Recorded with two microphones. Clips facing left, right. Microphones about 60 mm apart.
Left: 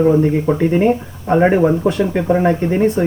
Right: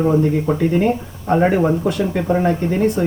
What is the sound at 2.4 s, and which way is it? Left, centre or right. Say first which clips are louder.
Speech: left 3 dB; left.